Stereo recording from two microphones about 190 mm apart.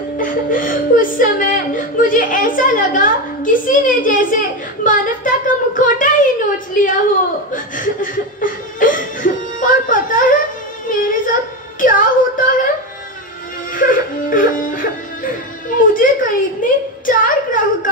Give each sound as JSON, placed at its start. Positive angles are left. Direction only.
{"t": 0.2, "sound": "speech", "side_deg": 45}
{"t": 7.5, "sound": "chuckle", "side_deg": 45}
{"t": 10.9, "sound": "a sound", "side_deg": 45}
{"t": 11.8, "sound": "whimper", "side_deg": 45}
{"t": 13.7, "sound": "music", "side_deg": 45}
{"t": 15.8, "sound": "a sound", "side_deg": 45}